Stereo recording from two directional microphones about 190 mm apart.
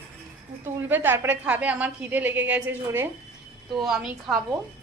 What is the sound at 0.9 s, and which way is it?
A woman's voice, 10° right (ahead or behind).